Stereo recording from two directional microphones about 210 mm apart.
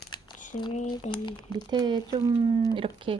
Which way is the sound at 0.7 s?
30° left (ahead or behind).